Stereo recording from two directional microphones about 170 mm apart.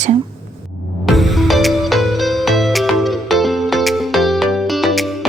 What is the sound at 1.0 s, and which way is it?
Music, centre (ahead or behind).